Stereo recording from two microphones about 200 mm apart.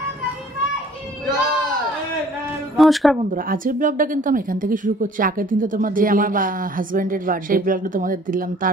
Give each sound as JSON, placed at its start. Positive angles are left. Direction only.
{"t": 2.8, "sound": "speech", "side_deg": 0}
{"t": 3.3, "sound": "speech", "side_deg": -40}